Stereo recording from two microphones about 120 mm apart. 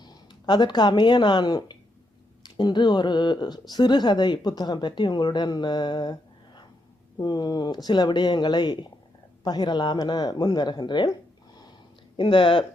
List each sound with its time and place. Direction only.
0.0 s speech: 35° left (ahead or behind)
12.1 s speech: 45° left (ahead or behind)